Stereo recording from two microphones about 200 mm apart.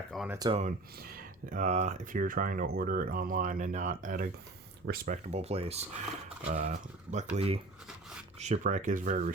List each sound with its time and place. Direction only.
0.3 s speech: 20° right (ahead or behind)
0.5 s speech: 40° right (ahead or behind)